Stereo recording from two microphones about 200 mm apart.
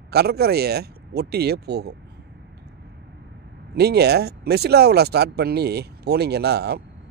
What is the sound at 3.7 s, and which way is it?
Speech, 55° right (ahead or behind).